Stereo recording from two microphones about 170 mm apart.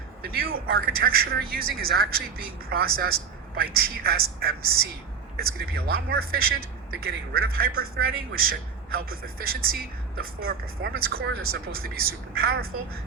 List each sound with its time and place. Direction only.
0.2 s a man's voice: 60° right (ahead or behind)